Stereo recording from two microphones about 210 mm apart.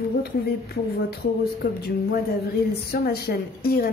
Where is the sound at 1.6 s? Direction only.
45° left (ahead or behind).